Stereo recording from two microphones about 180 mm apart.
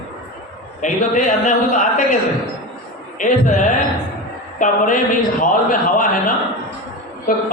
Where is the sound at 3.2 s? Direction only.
45° left (ahead or behind).